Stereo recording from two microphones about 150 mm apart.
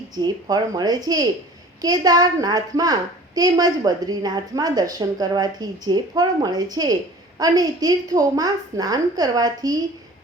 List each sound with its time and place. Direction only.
0.2 s a woman's voice: 25° right (ahead or behind)